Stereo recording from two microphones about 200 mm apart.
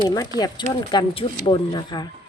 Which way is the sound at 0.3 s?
20° left (ahead or behind).